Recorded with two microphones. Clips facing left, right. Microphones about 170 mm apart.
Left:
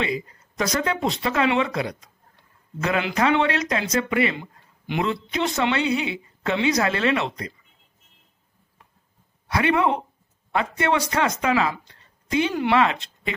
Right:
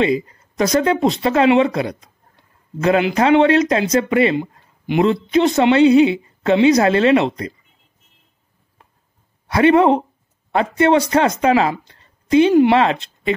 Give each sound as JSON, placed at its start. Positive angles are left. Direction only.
{"t": 0.0, "sound": "a woman's voice", "side_deg": -25}
{"t": 9.5, "sound": "a woman's voice", "side_deg": -35}